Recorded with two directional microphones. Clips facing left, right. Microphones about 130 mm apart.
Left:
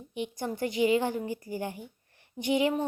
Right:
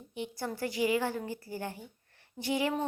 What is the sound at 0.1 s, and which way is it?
A woman's voice, 20° left (ahead or behind).